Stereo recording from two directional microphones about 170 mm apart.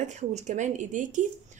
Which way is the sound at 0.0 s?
45° right (ahead or behind).